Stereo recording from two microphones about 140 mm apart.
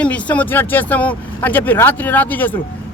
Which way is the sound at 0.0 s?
10° left (ahead or behind).